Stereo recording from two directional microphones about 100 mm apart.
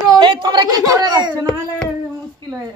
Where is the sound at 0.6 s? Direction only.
35° right (ahead or behind).